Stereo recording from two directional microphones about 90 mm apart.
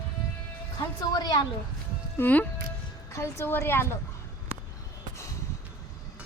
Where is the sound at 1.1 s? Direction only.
45° left (ahead or behind).